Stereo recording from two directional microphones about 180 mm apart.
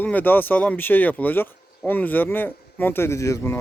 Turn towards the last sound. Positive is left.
turn(degrees=15)  # may be behind; listen again after turning